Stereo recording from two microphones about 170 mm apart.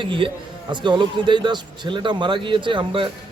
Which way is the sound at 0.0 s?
30° right (ahead or behind).